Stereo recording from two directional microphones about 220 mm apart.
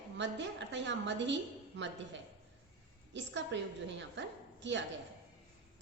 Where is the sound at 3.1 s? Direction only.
55° right (ahead or behind).